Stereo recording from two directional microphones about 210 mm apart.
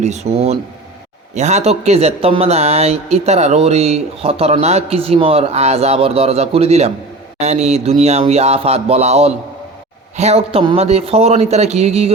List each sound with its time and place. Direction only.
0.0 s speech: 30° right (ahead or behind)